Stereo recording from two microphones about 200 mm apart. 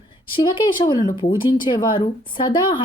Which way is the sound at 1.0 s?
20° left (ahead or behind).